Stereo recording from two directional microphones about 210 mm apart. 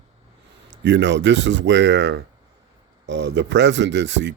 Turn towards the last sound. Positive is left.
turn(degrees=-60)  # may be behind; listen again after turning